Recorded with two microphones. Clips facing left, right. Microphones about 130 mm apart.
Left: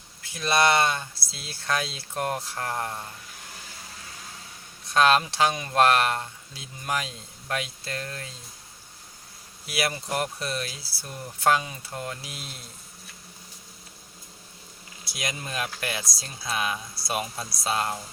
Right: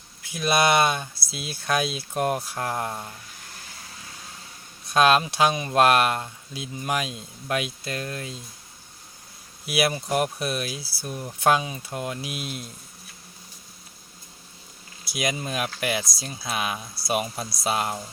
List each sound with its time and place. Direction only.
0.3 s speech: 10° right (ahead or behind)
4.9 s speech: 15° right (ahead or behind)
9.6 s speech: 15° right (ahead or behind)
15.1 s speech: 10° right (ahead or behind)